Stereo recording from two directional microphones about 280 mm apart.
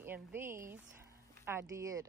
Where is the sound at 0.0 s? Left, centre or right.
Centre.